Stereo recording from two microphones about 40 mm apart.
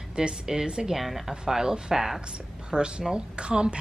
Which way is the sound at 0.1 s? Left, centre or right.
Centre.